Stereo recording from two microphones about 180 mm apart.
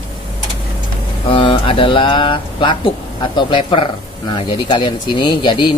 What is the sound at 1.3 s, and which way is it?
Speech, 30° left (ahead or behind).